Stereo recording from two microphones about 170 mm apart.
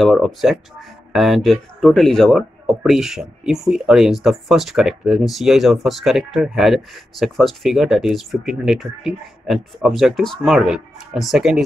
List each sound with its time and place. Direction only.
0.0 s speech: centre (ahead or behind)